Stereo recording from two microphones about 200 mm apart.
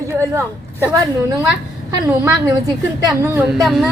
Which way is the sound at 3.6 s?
Centre (ahead or behind).